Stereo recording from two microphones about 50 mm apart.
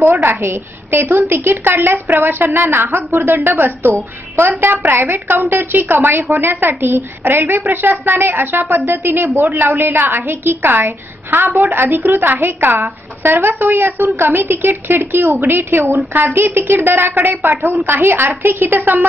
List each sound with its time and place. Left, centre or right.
0.1 s a woman's voice: right